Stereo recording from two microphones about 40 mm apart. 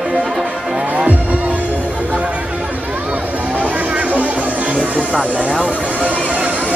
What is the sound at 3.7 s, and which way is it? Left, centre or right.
Music, right.